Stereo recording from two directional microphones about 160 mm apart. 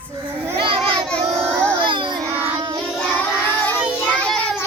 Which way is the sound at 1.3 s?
5° left (ahead or behind).